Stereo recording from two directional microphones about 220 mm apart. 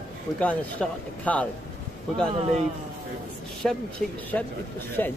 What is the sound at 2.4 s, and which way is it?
Speech, 30° right (ahead or behind).